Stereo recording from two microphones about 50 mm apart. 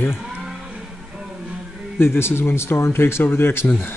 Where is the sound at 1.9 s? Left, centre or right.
Left.